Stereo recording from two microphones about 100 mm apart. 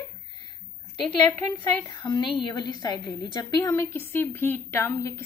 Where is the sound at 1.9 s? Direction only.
45° left (ahead or behind).